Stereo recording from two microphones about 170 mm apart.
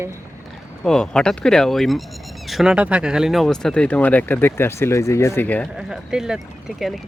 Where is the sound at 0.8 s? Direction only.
5° left (ahead or behind).